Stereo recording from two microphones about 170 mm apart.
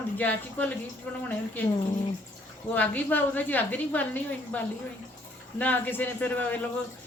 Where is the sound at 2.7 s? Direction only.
10° left (ahead or behind).